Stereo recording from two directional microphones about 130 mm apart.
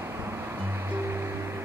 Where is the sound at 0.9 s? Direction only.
20° right (ahead or behind).